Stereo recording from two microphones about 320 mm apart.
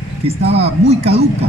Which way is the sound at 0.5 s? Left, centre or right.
Centre.